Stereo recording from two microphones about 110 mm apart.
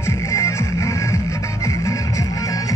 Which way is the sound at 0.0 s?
25° left (ahead or behind).